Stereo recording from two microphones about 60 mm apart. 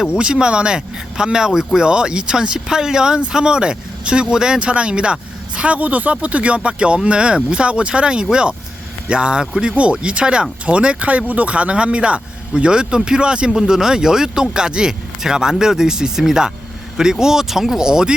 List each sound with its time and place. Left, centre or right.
0.2 s speech: centre